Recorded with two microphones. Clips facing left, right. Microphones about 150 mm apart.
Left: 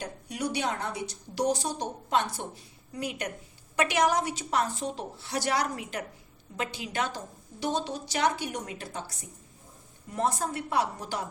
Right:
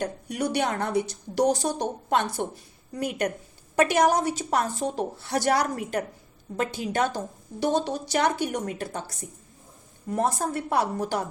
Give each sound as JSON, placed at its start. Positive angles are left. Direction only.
{"t": 0.0, "sound": "a woman's voice", "side_deg": -55}